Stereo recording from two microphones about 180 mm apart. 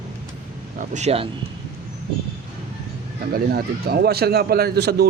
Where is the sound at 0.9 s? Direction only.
35° right (ahead or behind).